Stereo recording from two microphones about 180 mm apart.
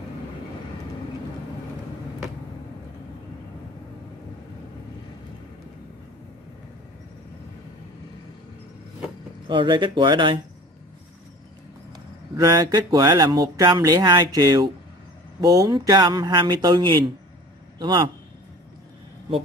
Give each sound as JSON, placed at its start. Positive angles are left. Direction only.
{"t": 9.5, "sound": "speech", "side_deg": -25}
{"t": 12.4, "sound": "speech", "side_deg": -20}